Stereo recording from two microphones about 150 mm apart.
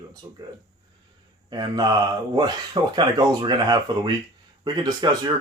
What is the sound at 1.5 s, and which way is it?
Speech, 25° right (ahead or behind).